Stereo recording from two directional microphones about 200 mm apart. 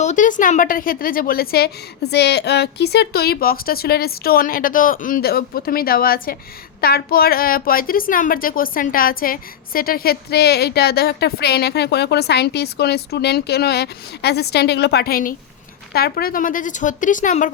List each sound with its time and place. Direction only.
0.0 s a woman's voice: 40° left (ahead or behind)